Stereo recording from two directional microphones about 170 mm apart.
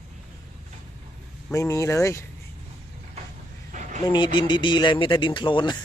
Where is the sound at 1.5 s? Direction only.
15° left (ahead or behind).